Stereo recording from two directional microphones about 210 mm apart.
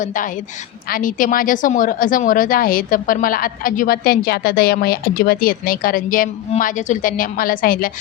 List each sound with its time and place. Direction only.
0.0 s a woman's voice: 40° left (ahead or behind)